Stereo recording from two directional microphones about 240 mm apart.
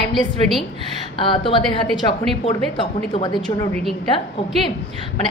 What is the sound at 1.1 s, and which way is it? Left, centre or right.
A woman's voice, left.